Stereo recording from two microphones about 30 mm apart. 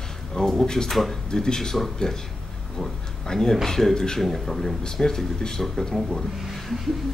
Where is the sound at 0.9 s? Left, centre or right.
Centre.